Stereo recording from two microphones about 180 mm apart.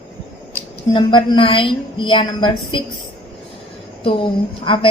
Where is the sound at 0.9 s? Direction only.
25° left (ahead or behind).